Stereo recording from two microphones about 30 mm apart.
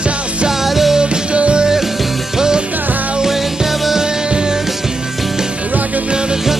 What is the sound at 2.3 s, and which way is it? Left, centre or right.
Music, right.